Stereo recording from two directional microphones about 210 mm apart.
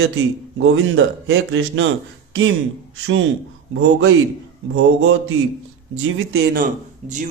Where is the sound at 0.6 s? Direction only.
70° right (ahead or behind).